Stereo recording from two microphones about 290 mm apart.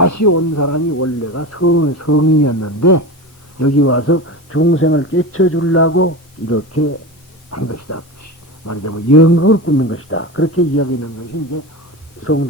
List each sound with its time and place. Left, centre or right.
0.0 s speech: left
3.6 s speech: left
12.2 s speech: left